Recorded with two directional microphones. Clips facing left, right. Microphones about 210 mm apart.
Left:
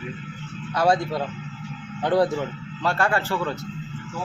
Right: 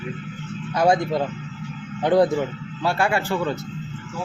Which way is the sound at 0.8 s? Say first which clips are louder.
Right 2 dB; 15° right (ahead or behind).